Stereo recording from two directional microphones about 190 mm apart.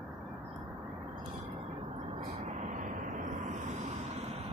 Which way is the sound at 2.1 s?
35° right (ahead or behind).